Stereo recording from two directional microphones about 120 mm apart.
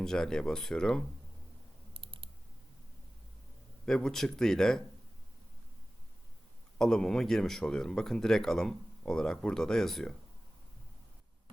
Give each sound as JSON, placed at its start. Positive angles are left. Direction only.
{"t": 0.0, "sound": "speech", "side_deg": 5}
{"t": 1.9, "sound": "typing", "side_deg": -50}
{"t": 3.8, "sound": "speech", "side_deg": 5}
{"t": 6.7, "sound": "speech", "side_deg": 5}